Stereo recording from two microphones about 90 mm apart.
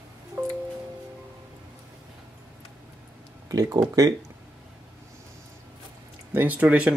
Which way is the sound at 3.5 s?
40° right (ahead or behind).